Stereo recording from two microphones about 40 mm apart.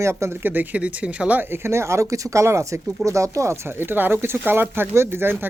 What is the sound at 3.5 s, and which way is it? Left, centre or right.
Speech, right.